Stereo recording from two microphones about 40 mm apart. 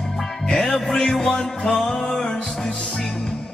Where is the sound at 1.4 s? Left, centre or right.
Centre.